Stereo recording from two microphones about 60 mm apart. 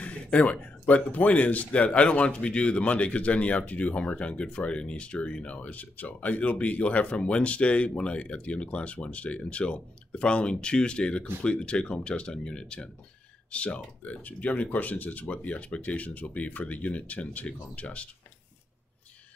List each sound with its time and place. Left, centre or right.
0.0 s speech: left